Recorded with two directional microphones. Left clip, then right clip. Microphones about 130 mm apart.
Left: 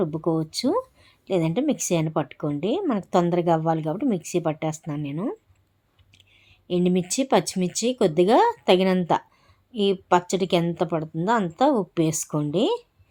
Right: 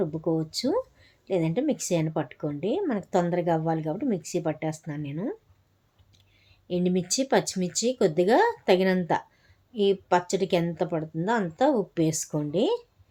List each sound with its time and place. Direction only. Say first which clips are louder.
0.0 s speech: left 3 dB; 35° left (ahead or behind)
6.7 s speech: left 3 dB; 30° left (ahead or behind)